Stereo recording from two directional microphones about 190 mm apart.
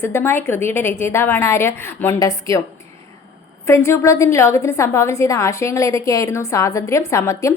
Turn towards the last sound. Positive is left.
turn(degrees=15)  # may be behind; listen again after turning